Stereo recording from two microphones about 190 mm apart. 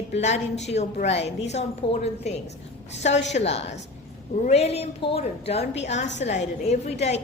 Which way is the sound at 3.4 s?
30° left (ahead or behind).